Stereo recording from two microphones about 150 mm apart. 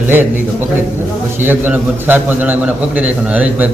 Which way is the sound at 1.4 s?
10° right (ahead or behind).